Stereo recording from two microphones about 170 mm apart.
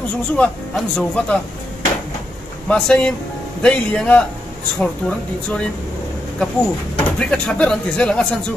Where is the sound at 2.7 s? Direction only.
5° left (ahead or behind).